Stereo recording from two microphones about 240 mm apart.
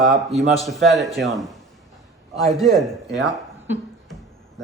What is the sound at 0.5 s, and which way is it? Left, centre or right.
A man's voice, centre.